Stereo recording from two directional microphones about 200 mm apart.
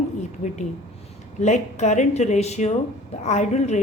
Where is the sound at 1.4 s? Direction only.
35° left (ahead or behind).